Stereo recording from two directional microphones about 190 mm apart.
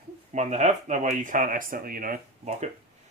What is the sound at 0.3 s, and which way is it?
Speech, 35° right (ahead or behind).